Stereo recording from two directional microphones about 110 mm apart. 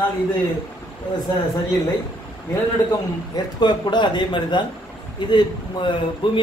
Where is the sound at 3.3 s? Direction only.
40° left (ahead or behind).